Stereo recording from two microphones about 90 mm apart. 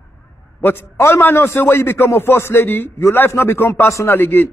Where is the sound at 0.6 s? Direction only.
25° left (ahead or behind).